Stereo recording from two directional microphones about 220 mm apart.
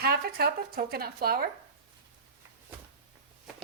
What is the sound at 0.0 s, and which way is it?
A woman's voice, 45° right (ahead or behind).